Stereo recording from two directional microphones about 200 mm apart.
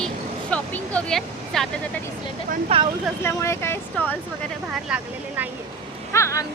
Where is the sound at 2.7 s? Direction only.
30° right (ahead or behind).